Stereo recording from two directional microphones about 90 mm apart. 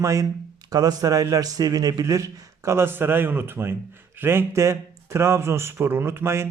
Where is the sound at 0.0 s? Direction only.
35° right (ahead or behind).